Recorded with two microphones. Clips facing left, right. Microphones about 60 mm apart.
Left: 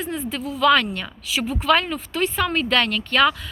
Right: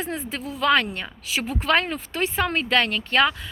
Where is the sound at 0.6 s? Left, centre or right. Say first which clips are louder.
Left 3 dB; right.